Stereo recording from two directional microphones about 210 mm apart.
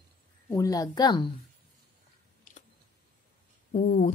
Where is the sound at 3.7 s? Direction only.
35° left (ahead or behind).